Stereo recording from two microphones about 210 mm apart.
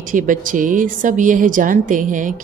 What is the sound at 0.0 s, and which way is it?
A woman's voice, 40° right (ahead or behind).